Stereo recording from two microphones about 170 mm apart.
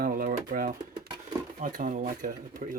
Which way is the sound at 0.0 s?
55° right (ahead or behind).